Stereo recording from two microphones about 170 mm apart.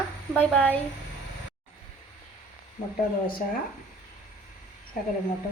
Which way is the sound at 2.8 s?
45° left (ahead or behind).